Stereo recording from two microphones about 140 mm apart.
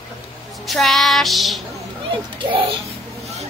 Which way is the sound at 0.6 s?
Centre (ahead or behind).